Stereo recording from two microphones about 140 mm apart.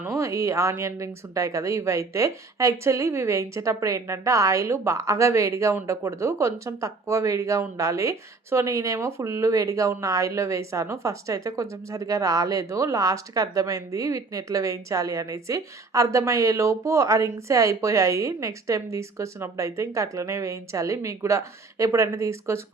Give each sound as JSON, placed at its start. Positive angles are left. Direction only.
{"t": 0.0, "sound": "speech", "side_deg": -20}